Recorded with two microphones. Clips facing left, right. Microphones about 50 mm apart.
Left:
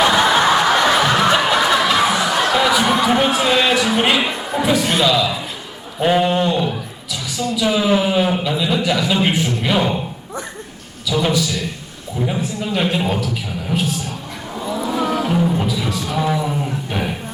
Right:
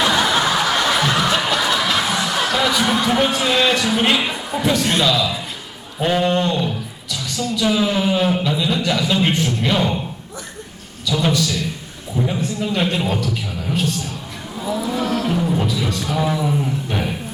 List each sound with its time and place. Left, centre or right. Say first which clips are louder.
0.0 s snicker: left 3 dB; centre
0.7 s music: left 3 dB; centre
1.9 s a woman's voice: left 4 dB; centre
11.1 s music: left 1 dB; centre
12.2 s a man's voice: even; centre
15.0 s music: left 3 dB; centre